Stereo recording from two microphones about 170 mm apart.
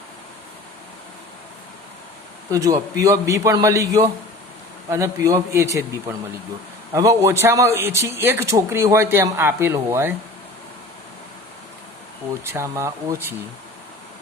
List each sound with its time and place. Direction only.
2.5 s a man's voice: 20° right (ahead or behind)
12.5 s speech: 15° right (ahead or behind)